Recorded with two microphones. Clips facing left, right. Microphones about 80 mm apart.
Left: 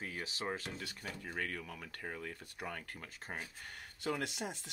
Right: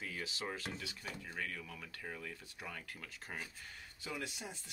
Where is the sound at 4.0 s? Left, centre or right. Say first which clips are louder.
Left 6 dB; left.